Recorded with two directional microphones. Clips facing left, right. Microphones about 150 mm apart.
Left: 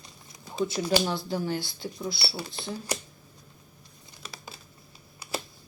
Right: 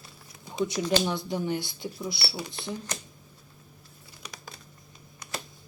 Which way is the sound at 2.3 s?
15° right (ahead or behind).